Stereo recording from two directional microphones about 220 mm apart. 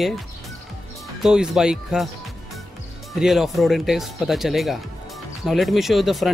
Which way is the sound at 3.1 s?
Centre (ahead or behind).